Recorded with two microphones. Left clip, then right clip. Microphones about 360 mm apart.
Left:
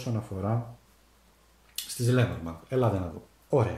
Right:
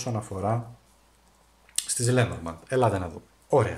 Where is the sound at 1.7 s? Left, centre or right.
Centre.